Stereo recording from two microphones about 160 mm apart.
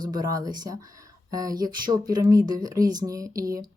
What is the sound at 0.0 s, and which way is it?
Speech, 25° right (ahead or behind).